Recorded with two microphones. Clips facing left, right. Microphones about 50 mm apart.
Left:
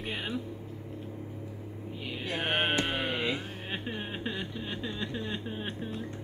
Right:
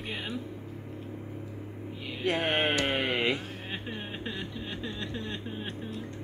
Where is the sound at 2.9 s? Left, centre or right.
Right.